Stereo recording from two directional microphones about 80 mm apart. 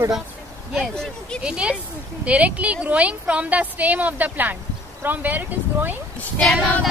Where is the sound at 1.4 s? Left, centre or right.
Centre.